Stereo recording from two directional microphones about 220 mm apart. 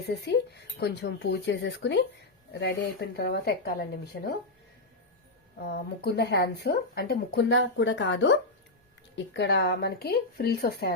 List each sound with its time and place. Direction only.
0.1 s speech: 50° left (ahead or behind)
5.6 s speech: 45° left (ahead or behind)